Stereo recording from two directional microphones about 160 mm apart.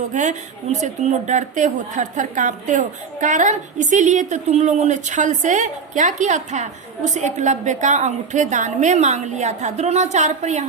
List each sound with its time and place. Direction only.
0.1 s speech: 50° right (ahead or behind)